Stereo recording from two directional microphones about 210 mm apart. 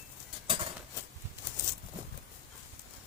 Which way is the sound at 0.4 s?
25° right (ahead or behind).